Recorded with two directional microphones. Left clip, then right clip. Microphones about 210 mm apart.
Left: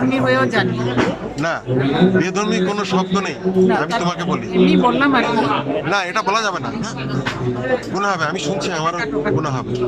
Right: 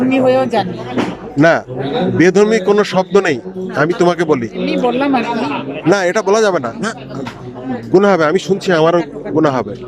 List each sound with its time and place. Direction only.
0.1 s speech: 10° right (ahead or behind)
1.4 s a man's voice: 35° right (ahead or behind)
4.6 s speech: 5° right (ahead or behind)
5.9 s a man's voice: 35° right (ahead or behind)
7.9 s a man's voice: 40° right (ahead or behind)